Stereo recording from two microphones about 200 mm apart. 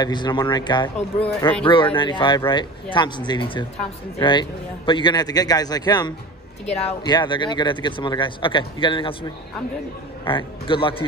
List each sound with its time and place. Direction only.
0.0 s speech: 20° left (ahead or behind)
10.2 s speech: 25° left (ahead or behind)